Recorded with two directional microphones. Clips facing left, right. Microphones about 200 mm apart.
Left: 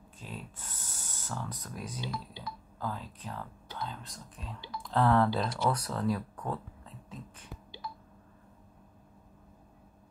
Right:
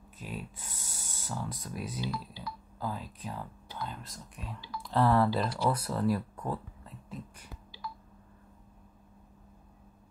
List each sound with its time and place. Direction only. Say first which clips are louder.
0.2 s speech: right 3 dB; 15° right (ahead or behind)
2.0 s speech: right 2 dB; 20° left (ahead or behind)
2.8 s speech: right 1 dB; 10° right (ahead or behind)